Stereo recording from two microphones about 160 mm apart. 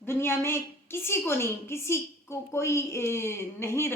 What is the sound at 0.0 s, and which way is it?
A woman's voice, 15° left (ahead or behind).